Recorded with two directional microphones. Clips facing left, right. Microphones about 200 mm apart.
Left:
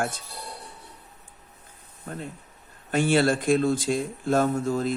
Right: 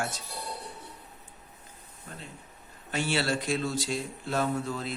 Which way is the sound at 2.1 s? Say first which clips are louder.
Left 9 dB; 50° left (ahead or behind).